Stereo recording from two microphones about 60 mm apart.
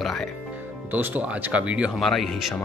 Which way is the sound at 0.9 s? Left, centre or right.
Right.